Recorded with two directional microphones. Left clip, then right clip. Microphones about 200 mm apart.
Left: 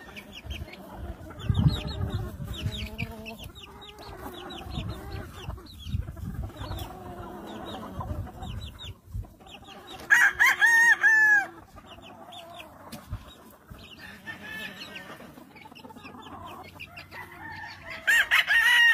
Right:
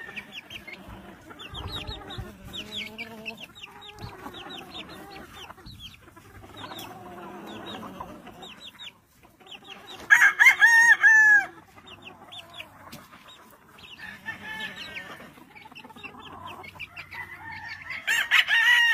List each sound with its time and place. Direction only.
0.3 s a sound: 25° left (ahead or behind)
2.5 s chicken: 25° left (ahead or behind)
7.2 s chicken: centre (ahead or behind)
10.0 s chicken: 25° right (ahead or behind)
18.0 s chicken: 45° left (ahead or behind)